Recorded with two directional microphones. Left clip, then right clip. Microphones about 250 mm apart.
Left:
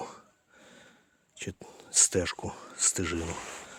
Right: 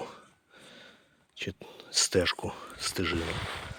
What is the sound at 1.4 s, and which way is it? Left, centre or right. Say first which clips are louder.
Speech: right 3 dB; centre.